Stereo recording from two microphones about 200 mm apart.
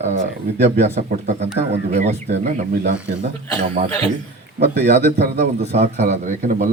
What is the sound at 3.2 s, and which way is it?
Speech, 35° right (ahead or behind).